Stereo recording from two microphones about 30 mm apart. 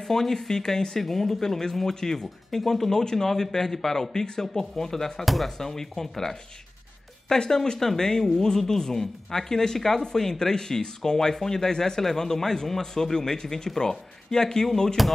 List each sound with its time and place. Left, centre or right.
0.0 s speech: centre
2.5 s speech: centre
3.0 s speech: left
5.2 s speech: centre
5.6 s speech: centre
7.5 s speech: left
15.0 s speech: centre